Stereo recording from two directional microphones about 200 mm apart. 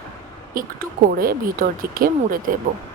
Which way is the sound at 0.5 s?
45° right (ahead or behind).